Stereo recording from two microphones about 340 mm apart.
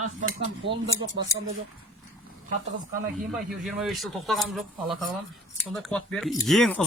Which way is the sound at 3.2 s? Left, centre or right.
Centre.